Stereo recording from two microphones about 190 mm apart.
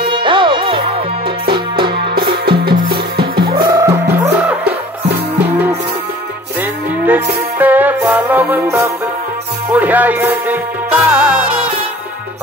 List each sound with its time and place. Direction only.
0.0 s music: 25° right (ahead or behind)
2.1 s music: 55° right (ahead or behind)
3.7 s music: 15° right (ahead or behind)
7.1 s music: 10° right (ahead or behind)